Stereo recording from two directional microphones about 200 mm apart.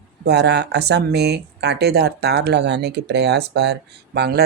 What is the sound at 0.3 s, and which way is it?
Speech, 55° right (ahead or behind).